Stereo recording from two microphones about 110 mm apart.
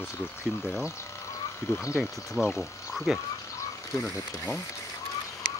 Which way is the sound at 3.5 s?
25° left (ahead or behind).